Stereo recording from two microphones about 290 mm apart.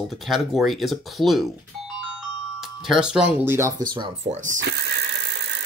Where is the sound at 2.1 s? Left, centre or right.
Centre.